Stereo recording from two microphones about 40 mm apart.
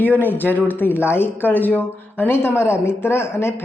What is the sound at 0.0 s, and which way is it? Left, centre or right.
Speech, left.